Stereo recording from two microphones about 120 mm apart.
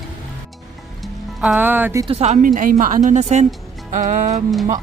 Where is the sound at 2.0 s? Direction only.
60° right (ahead or behind); by 3.5 s 80° right.